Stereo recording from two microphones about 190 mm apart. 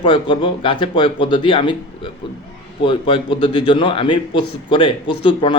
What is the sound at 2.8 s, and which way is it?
Speech, 25° left (ahead or behind).